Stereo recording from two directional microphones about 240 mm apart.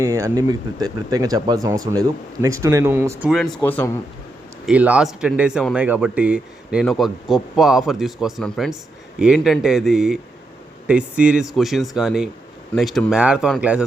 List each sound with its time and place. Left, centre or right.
0.0 s speech: centre
4.6 s speech: centre